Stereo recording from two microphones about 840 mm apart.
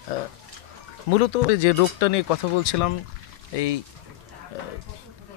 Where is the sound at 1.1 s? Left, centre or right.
Left.